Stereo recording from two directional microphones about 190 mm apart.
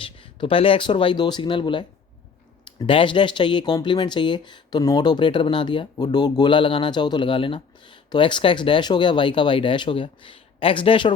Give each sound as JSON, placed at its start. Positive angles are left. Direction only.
{"t": 0.0, "sound": "speech", "side_deg": 25}